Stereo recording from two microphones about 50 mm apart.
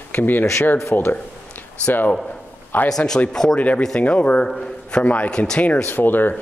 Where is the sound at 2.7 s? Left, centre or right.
Left.